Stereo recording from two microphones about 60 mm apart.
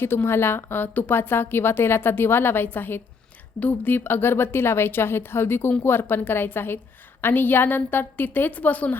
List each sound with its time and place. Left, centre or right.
0.0 s a woman's voice: left